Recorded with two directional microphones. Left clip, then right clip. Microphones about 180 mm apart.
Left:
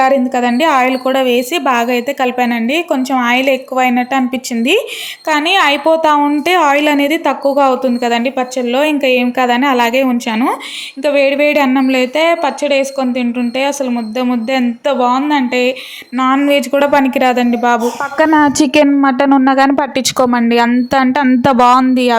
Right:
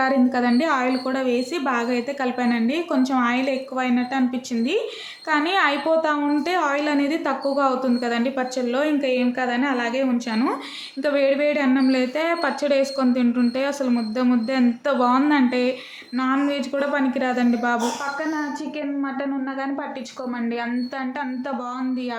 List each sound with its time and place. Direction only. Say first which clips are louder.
0.0 s a woman's voice: left 9 dB; 20° left (ahead or behind)
5.3 s a woman's voice: left 9 dB; 20° left (ahead or behind)
16.5 s speech: left 13 dB; 35° left (ahead or behind)
18.2 s a woman's voice: left 17 dB; 70° left (ahead or behind)